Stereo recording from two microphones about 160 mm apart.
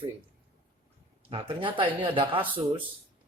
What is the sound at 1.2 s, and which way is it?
Speech, 35° right (ahead or behind).